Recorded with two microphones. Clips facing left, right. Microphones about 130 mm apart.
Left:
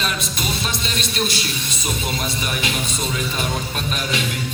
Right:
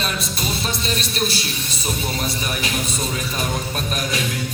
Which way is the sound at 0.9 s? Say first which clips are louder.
Right 1 dB; 35° right (ahead or behind).